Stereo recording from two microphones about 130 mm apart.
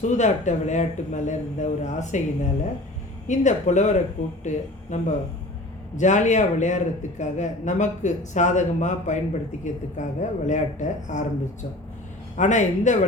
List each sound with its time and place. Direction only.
0.0 s a man's voice: 65° left (ahead or behind)
12.4 s a man's voice: 70° left (ahead or behind)